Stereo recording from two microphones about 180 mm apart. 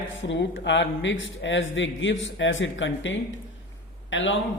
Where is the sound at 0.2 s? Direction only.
90° left.